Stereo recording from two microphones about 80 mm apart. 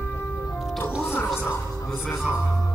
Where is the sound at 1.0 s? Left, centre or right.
Left.